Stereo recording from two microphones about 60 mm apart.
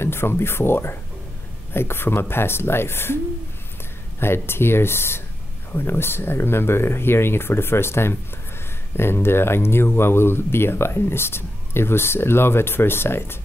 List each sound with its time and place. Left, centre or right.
0.0 s speech: left
4.2 s speech: left